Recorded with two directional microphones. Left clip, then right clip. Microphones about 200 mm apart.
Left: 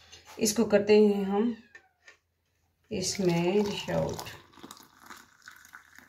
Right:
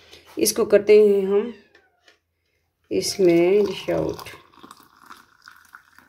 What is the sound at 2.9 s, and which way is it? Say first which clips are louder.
Speech: right 11 dB; 55° right (ahead or behind).